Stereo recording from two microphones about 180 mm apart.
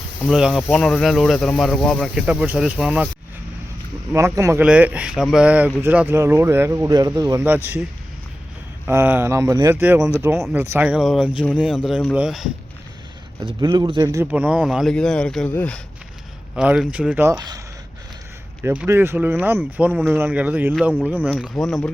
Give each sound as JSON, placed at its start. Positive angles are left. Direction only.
{"t": 0.3, "sound": "speech", "side_deg": 0}
{"t": 4.1, "sound": "speech", "side_deg": -15}
{"t": 8.9, "sound": "speech", "side_deg": -10}
{"t": 13.4, "sound": "speech", "side_deg": -25}
{"t": 16.6, "sound": "speech", "side_deg": -5}
{"t": 18.6, "sound": "speech", "side_deg": -10}
{"t": 20.7, "sound": "speech", "side_deg": 5}